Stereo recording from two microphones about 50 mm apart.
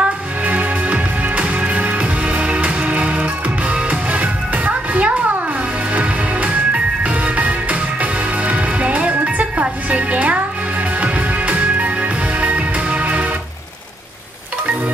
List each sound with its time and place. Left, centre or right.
0.0 s music: right